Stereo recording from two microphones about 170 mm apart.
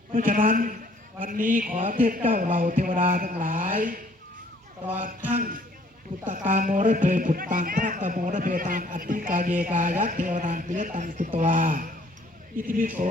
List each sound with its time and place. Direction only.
0.1 s speech: 55° right (ahead or behind)
6.3 s speech: 50° right (ahead or behind)